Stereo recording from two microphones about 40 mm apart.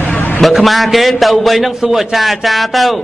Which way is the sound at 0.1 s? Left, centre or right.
Left.